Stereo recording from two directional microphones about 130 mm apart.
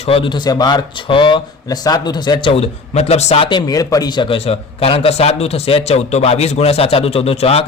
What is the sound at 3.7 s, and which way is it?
A man's voice, 25° left (ahead or behind).